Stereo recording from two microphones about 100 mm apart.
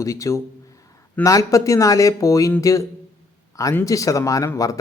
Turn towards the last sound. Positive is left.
turn(degrees=35)  # may be behind; listen again after turning